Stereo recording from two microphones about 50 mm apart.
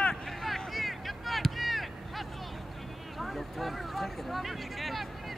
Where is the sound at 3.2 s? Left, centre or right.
Centre.